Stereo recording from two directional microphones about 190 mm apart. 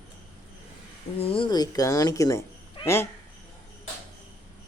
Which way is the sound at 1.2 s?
30° left (ahead or behind).